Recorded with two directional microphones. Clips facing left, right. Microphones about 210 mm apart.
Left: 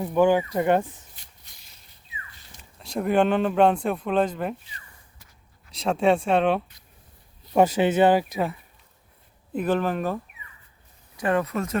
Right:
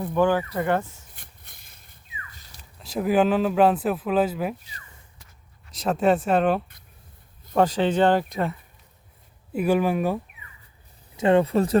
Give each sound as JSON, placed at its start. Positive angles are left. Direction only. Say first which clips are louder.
{"t": 0.0, "sound": "speech", "louder": "left 2 dB", "side_deg": 15}
{"t": 1.1, "sound": "a sound", "louder": "right 3 dB", "side_deg": -55}
{"t": 2.7, "sound": "speech", "louder": "right 1 dB", "side_deg": 0}
{"t": 5.7, "sound": "speech", "louder": "even", "side_deg": -5}
{"t": 7.5, "sound": "speech", "louder": "left 1 dB", "side_deg": 10}
{"t": 9.5, "sound": "speech", "louder": "right 2 dB", "side_deg": -10}
{"t": 11.2, "sound": "speech", "louder": "right 5 dB", "side_deg": -25}